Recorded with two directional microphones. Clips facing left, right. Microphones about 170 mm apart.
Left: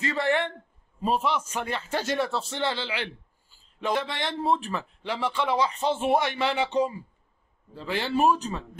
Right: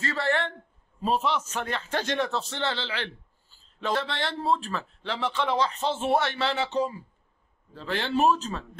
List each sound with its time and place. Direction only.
0.0 s a man's voice: 15° left (ahead or behind)